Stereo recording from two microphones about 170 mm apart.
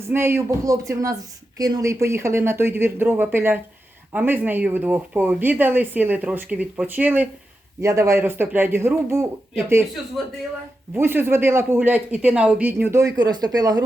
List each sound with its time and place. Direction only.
0.1 s speech: 15° right (ahead or behind)
10.9 s speech: 15° right (ahead or behind)